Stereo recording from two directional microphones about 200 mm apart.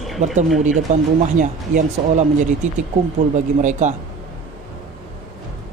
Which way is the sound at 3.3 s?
35° right (ahead or behind).